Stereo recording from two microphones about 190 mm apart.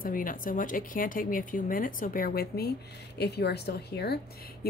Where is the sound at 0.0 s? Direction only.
45° left (ahead or behind).